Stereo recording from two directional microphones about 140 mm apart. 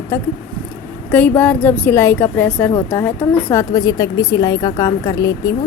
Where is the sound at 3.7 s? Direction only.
25° left (ahead or behind).